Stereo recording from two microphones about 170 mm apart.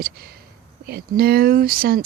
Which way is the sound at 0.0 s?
60° right (ahead or behind).